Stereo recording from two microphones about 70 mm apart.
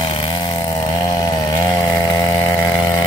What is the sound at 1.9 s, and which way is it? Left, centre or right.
Chainsaw, left.